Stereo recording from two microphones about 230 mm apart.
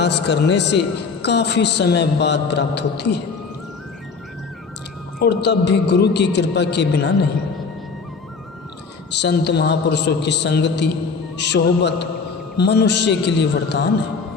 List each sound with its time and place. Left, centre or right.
0.0 s a man's voice: left
5.2 s a man's voice: left
9.1 s a man's voice: left